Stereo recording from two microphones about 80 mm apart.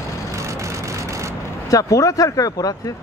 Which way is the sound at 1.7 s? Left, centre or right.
Left.